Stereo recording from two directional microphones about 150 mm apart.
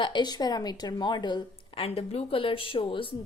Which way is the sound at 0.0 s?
30° left (ahead or behind).